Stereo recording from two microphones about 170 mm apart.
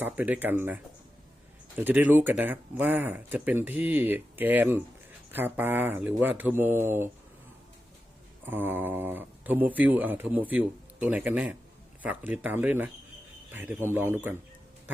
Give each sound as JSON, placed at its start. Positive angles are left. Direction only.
{"t": 0.0, "sound": "speech", "side_deg": -10}
{"t": 8.4, "sound": "speech", "side_deg": -10}